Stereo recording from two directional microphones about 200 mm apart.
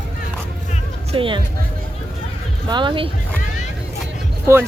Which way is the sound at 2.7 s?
25° right (ahead or behind).